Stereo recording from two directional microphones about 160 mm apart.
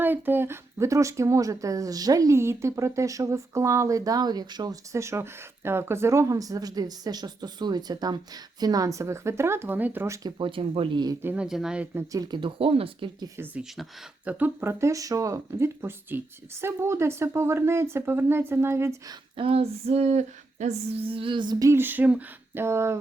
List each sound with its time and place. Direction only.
0.0 s speech: 10° right (ahead or behind)
10.2 s speech: 30° right (ahead or behind)
11.2 s speech: 10° right (ahead or behind)
11.9 s speech: 20° right (ahead or behind)
19.4 s speech: 40° right (ahead or behind); by 23.0 s 15° right (ahead or behind)